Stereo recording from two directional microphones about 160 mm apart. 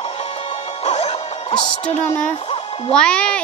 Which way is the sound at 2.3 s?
40° left (ahead or behind).